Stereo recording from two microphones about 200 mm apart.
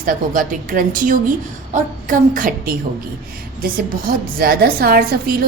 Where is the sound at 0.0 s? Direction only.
45° right (ahead or behind).